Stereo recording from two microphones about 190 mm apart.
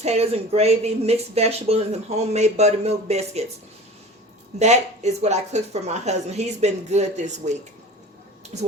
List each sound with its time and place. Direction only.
0.0 s speech: 35° right (ahead or behind)
4.6 s speech: 35° right (ahead or behind)